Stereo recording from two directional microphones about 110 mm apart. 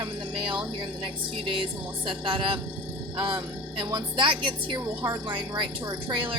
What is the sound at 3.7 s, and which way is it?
A woman's voice, 45° right (ahead or behind).